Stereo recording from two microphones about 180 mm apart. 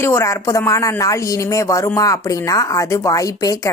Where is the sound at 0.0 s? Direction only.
15° left (ahead or behind).